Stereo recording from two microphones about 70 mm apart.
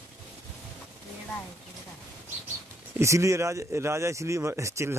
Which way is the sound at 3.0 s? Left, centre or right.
Right.